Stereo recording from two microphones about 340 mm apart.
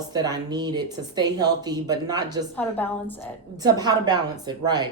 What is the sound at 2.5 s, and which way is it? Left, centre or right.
Speech, centre.